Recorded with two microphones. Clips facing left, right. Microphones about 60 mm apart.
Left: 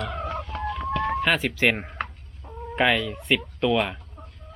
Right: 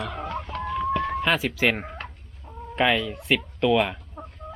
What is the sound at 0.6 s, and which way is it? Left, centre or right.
Chicken, centre.